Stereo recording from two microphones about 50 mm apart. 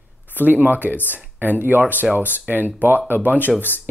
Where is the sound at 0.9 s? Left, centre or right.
Left.